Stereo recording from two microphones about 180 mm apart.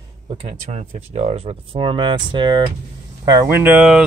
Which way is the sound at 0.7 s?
35° right (ahead or behind).